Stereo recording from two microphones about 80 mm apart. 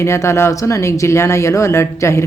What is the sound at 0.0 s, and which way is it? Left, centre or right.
Speech, left.